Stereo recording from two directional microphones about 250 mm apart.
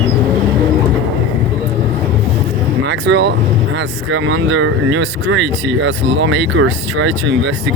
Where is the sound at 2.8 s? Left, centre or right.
Right.